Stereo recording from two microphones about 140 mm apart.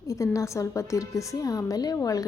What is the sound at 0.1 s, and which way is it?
A woman's voice, 20° left (ahead or behind).